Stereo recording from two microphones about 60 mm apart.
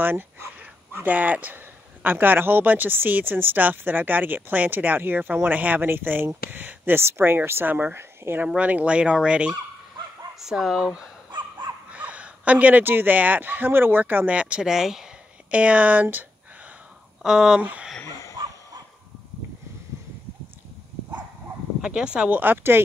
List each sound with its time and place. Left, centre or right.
0.0 s speech: right
8.5 s speech: right
10.4 s speech: centre
14.7 s speech: centre
15.5 s speech: right
17.2 s speech: centre
17.6 s speech: right
21.8 s speech: centre
22.3 s speech: right